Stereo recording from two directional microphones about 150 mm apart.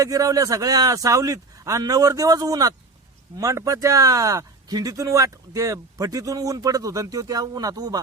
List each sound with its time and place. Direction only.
0.0 s speech: 25° right (ahead or behind)